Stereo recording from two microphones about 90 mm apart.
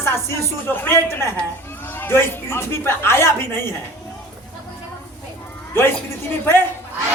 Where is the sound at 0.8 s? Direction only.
30° left (ahead or behind).